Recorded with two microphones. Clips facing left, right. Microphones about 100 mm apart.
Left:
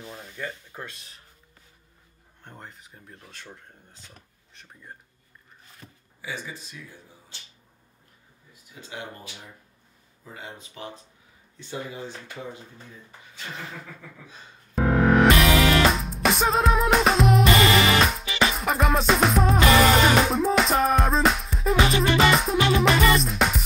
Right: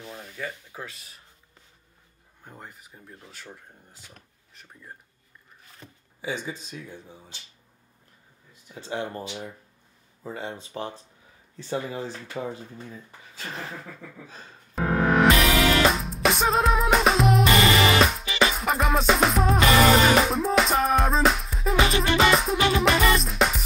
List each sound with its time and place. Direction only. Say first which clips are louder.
0.0 s speech: even; centre (ahead or behind)
2.4 s speech: even; 5° right (ahead or behind)
5.8 s speech: right 5 dB; 20° right (ahead or behind)
8.7 s speech: right 7 dB; 30° right (ahead or behind)
10.3 s speech: right 6 dB; 30° right (ahead or behind)
12.4 s speech: right 6 dB; 60° right (ahead or behind)
14.8 s music: left 2 dB; centre (ahead or behind)